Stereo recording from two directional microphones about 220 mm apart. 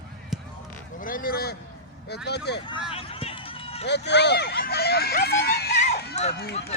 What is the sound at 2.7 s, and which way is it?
Run, 25° left (ahead or behind).